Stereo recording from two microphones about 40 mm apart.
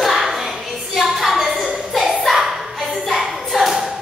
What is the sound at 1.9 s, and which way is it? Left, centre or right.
Clapping, centre.